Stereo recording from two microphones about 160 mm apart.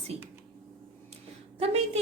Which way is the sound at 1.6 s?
40° right (ahead or behind).